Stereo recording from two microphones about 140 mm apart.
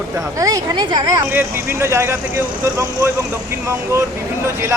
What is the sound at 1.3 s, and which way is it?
Speech, 15° right (ahead or behind).